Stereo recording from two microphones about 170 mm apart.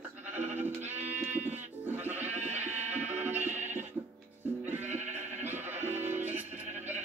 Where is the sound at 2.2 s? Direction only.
40° right (ahead or behind).